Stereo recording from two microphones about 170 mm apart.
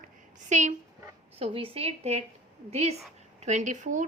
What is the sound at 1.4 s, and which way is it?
Speech, 35° right (ahead or behind).